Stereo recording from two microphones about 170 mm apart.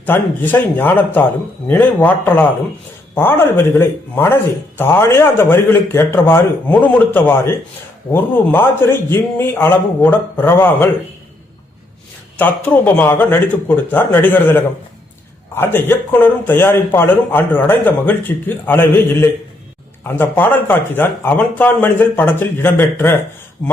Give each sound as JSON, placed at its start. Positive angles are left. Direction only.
{"t": 0.0, "sound": "a man's voice", "side_deg": 10}
{"t": 12.4, "sound": "a man's voice", "side_deg": 10}